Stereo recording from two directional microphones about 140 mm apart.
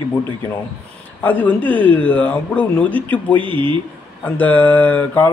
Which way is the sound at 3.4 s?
35° right (ahead or behind).